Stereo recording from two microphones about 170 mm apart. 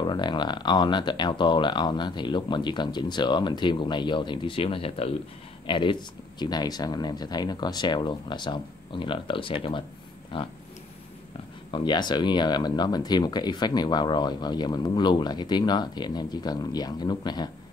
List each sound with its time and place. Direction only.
0.0 s speech: 25° left (ahead or behind)
10.3 s a sound: 30° left (ahead or behind)
11.7 s speech: 25° left (ahead or behind)